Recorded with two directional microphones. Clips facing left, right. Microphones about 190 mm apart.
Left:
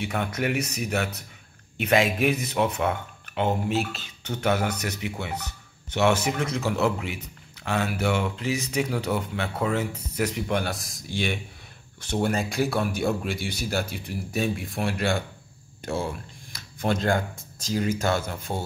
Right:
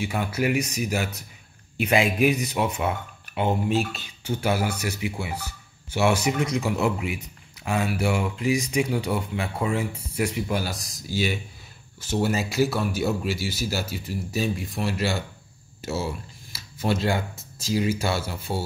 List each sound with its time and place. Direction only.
0.0 s speech: 5° right (ahead or behind)